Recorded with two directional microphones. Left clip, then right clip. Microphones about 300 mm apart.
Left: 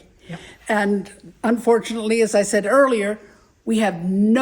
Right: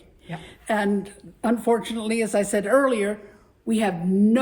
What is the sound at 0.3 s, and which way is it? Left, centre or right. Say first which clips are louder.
A woman's voice: left 4 dB; left.